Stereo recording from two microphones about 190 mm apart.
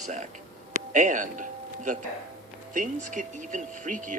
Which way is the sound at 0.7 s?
40° right (ahead or behind).